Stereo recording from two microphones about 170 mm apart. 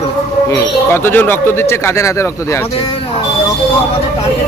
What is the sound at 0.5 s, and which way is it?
Speech, 15° left (ahead or behind).